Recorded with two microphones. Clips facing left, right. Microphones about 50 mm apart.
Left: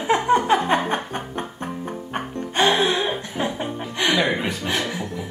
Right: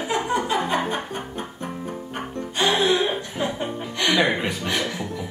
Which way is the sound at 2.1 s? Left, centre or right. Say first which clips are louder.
Left 2 dB; left.